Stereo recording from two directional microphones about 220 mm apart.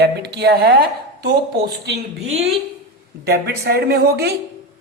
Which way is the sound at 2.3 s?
30° right (ahead or behind).